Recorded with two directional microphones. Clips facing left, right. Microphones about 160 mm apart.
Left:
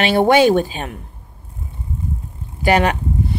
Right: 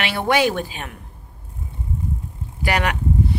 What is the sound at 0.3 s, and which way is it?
Speech, 25° left (ahead or behind).